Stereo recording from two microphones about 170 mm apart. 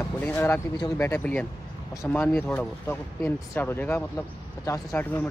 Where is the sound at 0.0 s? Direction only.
10° left (ahead or behind).